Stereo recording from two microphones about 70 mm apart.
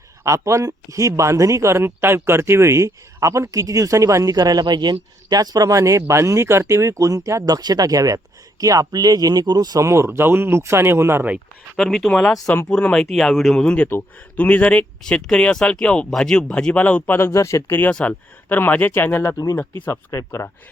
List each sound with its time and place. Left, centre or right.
0.3 s speech: right
7.4 s speech: right
9.8 s speech: right
11.8 s speech: centre
13.6 s speech: centre
13.8 s speech: left
17.2 s speech: left
18.1 s speech: left
19.9 s speech: left